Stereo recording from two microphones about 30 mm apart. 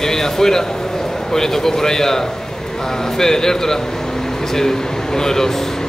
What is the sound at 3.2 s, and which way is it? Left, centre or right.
Speech, centre.